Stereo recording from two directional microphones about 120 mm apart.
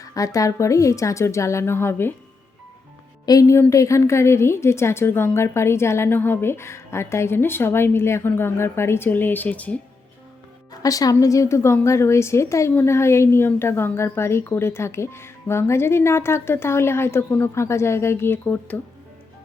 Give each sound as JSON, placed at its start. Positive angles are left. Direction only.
{"t": 0.0, "sound": "a woman's voice", "side_deg": 30}
{"t": 3.4, "sound": "a woman's voice", "side_deg": 20}
{"t": 10.8, "sound": "a woman's voice", "side_deg": 30}